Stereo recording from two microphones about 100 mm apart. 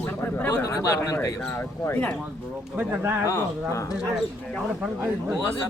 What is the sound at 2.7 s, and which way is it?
Speech, 25° right (ahead or behind).